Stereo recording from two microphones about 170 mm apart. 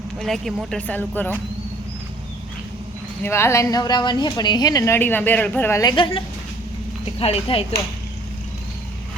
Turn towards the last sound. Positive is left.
turn(degrees=35)  # may be behind; listen again after turning